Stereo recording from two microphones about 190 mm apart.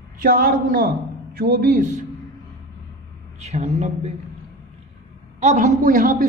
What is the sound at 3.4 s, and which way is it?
Speech, 35° right (ahead or behind).